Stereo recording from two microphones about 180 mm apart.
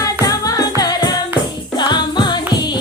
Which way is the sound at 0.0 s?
20° left (ahead or behind).